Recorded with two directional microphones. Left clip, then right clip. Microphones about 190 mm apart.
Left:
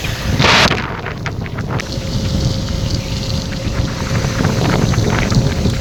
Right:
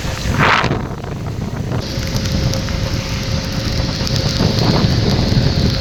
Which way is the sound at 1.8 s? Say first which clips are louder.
Right 1 dB; centre (ahead or behind).